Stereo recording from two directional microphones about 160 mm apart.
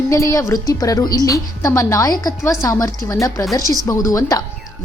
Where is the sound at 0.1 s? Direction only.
20° left (ahead or behind).